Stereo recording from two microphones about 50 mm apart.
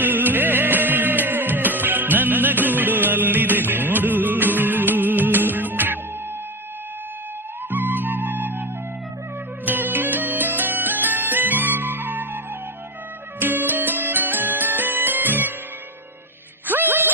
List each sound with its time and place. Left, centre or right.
0.0 s music: right
7.7 s music: right
9.6 s music: right
13.4 s music: right
16.6 s music: right